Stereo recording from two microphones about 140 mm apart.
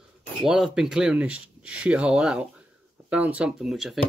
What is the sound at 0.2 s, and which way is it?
Speech, 5° right (ahead or behind).